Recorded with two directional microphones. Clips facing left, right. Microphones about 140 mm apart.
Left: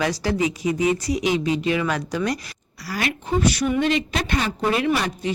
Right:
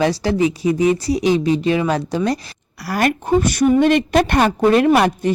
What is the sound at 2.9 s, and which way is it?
A woman's voice, 50° right (ahead or behind).